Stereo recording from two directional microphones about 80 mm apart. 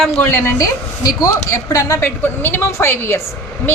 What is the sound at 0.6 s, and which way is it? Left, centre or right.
Speech, left.